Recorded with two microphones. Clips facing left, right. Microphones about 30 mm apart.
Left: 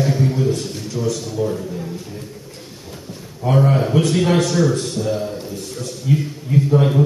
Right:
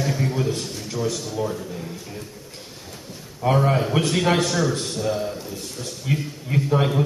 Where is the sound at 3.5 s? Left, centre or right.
Centre.